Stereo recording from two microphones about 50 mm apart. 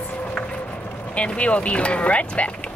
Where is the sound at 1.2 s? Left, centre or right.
Left.